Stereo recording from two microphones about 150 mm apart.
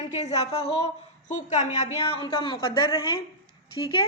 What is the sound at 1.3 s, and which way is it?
Speech, 55° left (ahead or behind).